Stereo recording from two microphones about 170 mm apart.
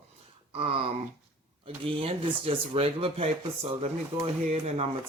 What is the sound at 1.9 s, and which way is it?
Speech, 30° right (ahead or behind).